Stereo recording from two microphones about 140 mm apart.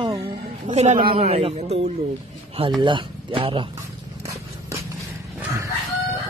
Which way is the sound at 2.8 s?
35° right (ahead or behind).